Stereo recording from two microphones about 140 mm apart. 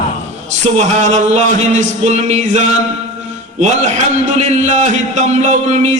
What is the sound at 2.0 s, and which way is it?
Speech, 55° right (ahead or behind).